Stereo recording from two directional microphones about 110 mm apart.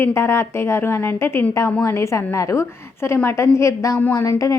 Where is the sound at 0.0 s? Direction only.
25° left (ahead or behind).